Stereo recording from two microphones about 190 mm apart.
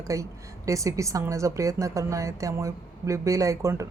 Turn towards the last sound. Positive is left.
turn(degrees=-15)  # may be behind; listen again after turning